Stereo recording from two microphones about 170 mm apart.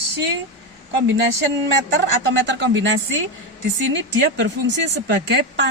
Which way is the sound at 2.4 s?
90° right.